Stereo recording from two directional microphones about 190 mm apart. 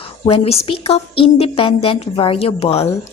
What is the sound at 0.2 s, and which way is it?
Speech, 30° left (ahead or behind).